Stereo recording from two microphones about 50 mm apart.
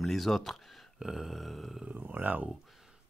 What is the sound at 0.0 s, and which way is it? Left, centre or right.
Speech, centre.